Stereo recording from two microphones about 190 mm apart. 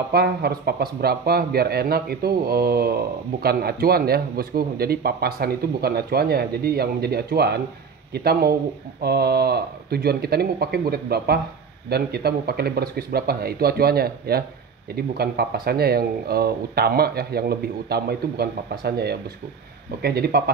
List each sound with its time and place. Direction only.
0.1 s speech: 55° right (ahead or behind)